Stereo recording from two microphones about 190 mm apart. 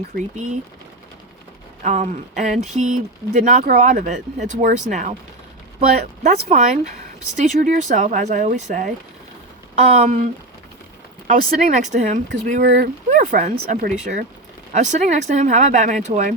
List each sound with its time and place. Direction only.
0.3 s speech: 40° right (ahead or behind)
1.8 s speech: 40° right (ahead or behind)
6.2 s speech: 35° right (ahead or behind)
11.3 s speech: 40° right (ahead or behind)
12.6 s speech: 60° right (ahead or behind)
13.1 s speech: 40° right (ahead or behind)